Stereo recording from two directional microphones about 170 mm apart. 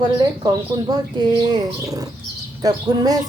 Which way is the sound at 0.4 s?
20° right (ahead or behind).